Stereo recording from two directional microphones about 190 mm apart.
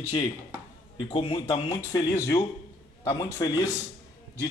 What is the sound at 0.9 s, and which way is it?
A man's voice, 25° left (ahead or behind).